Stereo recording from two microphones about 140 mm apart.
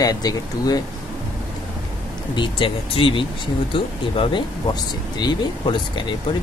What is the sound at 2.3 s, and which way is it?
Speech, 40° left (ahead or behind).